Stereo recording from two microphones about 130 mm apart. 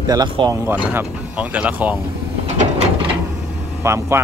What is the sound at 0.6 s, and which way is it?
Speech, 15° right (ahead or behind).